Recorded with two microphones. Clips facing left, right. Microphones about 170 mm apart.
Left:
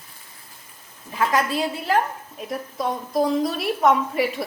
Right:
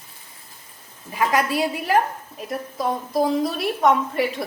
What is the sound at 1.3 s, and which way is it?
Speech, 10° right (ahead or behind).